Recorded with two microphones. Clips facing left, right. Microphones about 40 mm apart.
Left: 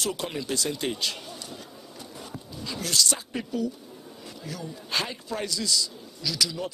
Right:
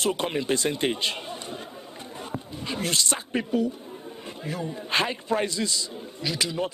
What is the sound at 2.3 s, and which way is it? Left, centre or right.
Speech, right.